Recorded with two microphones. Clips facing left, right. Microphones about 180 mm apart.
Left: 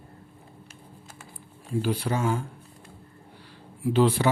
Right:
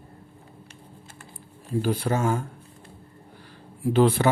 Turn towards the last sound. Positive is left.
turn(degrees=-50)  # may be behind; listen again after turning